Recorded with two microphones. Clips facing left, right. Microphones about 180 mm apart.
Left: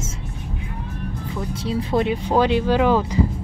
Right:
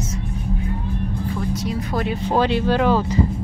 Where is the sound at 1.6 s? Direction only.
25° left (ahead or behind).